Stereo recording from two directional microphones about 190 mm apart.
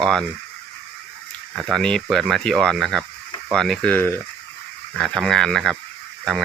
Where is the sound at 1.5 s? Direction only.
Centre (ahead or behind).